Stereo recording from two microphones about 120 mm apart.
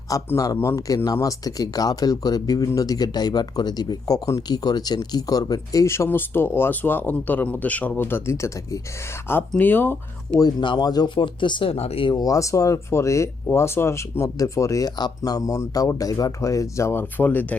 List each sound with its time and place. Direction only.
0.3 s speech: 25° left (ahead or behind)
10.4 s speech: 40° left (ahead or behind)
12.1 s speech: 30° left (ahead or behind)